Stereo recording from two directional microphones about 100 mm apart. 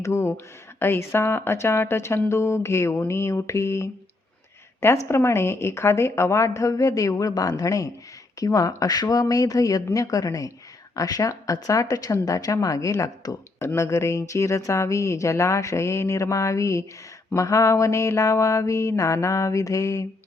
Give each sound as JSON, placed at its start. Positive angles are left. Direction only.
{"t": 0.0, "sound": "a woman's voice", "side_deg": 25}
{"t": 13.6, "sound": "speech", "side_deg": 25}